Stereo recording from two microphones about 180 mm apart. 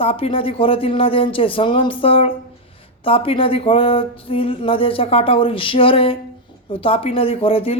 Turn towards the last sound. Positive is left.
turn(degrees=30)  # may be behind; listen again after turning